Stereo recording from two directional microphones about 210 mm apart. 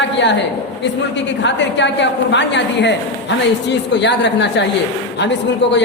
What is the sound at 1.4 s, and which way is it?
A man's voice, 55° left (ahead or behind).